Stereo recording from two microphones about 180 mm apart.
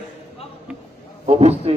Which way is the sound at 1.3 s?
35° right (ahead or behind).